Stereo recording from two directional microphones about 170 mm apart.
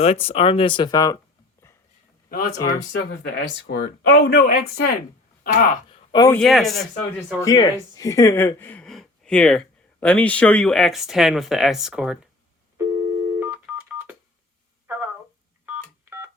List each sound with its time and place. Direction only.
0.0 s speech: 35° left (ahead or behind)
2.6 s speech: 20° left (ahead or behind)
3.3 s speech: 80° left; by 4.9 s 65° left (ahead or behind)
5.4 s speech: 50° left (ahead or behind)
5.9 s a sound: 25° left (ahead or behind)
6.3 s speech: centre (ahead or behind)
7.4 s speech: 20° left (ahead or behind); by 12.3 s 5° right (ahead or behind)
12.7 s telephone: 15° right (ahead or behind)
14.9 s a sound: 10° right (ahead or behind)
15.6 s telephone dialing: 10° right (ahead or behind)